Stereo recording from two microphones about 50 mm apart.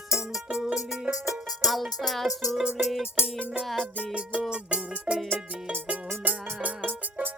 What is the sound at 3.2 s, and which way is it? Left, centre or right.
Music, left.